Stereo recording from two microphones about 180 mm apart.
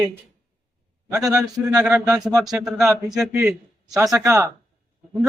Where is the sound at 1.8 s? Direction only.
10° right (ahead or behind).